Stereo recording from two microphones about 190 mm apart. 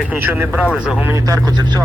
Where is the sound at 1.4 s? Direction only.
20° right (ahead or behind).